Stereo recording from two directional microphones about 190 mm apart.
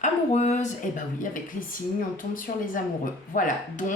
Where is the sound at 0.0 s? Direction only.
35° left (ahead or behind).